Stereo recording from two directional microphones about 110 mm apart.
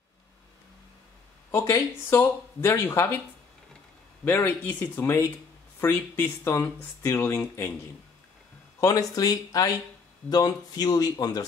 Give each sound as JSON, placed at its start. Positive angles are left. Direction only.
{"t": 1.5, "sound": "speech", "side_deg": 25}
{"t": 4.2, "sound": "speech", "side_deg": 15}
{"t": 8.7, "sound": "speech", "side_deg": 30}